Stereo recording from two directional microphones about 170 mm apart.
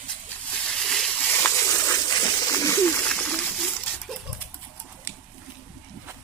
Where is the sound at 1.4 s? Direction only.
20° left (ahead or behind).